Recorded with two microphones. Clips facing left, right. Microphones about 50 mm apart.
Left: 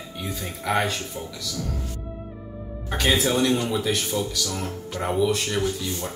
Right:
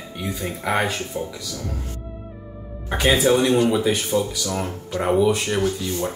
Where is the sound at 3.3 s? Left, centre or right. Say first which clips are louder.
Right 5 dB; right.